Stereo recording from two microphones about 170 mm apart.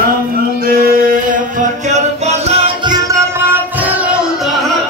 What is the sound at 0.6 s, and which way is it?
Music, 60° right (ahead or behind).